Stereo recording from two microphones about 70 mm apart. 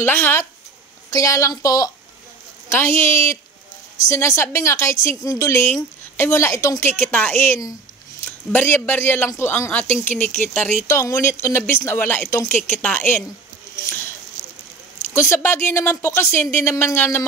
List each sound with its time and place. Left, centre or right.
0.0 s a woman's voice: left
1.1 s a woman's voice: left
2.7 s a woman's voice: left
6.8 s a woman's voice: left
9.7 s a woman's voice: left
10.9 s a woman's voice: left
12.4 s a woman's voice: left
15.1 s a woman's voice: left